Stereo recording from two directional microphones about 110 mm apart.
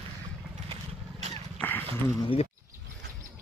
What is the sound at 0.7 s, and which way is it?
Vehicle, 80° right.